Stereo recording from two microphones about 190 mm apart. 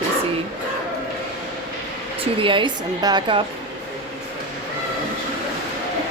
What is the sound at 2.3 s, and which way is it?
A woman's voice, 25° right (ahead or behind).